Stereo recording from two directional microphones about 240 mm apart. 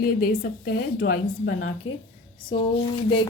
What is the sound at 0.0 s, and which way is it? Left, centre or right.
Speech, left.